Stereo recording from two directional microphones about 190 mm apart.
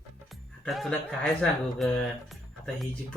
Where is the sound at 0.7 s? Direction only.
Centre (ahead or behind).